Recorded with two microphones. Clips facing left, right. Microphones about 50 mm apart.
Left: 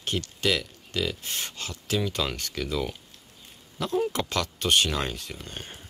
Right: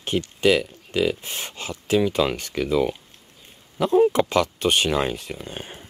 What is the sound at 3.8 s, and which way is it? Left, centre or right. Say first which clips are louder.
Speech: right 9 dB; right.